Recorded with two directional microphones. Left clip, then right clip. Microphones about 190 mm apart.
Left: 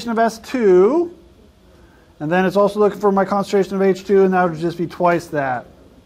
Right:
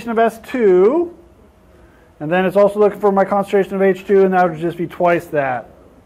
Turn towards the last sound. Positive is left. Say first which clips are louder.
# right 2 dB
turn(degrees=50)  # may be behind; listen again after turning